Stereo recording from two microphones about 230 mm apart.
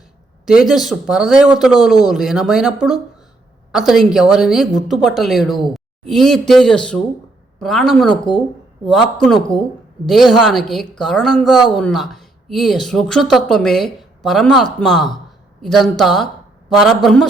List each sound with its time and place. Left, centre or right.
0.4 s a woman's voice: centre
8.3 s speech: centre
9.5 s speech: left
10.1 s a woman's voice: centre